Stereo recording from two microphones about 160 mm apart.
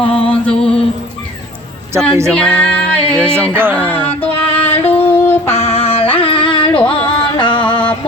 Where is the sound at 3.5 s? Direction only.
15° right (ahead or behind).